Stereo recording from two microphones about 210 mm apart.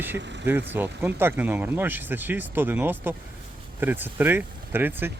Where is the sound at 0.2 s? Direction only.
55° right (ahead or behind).